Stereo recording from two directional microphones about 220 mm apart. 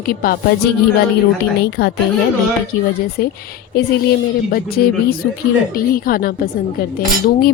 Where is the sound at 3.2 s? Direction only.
45° left (ahead or behind).